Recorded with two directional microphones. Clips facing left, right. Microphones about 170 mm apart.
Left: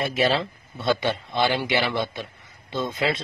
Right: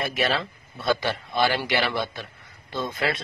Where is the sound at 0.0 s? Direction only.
25° left (ahead or behind).